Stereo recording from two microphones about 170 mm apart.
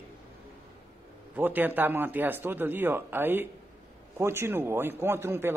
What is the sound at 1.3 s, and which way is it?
A man's voice, 10° right (ahead or behind).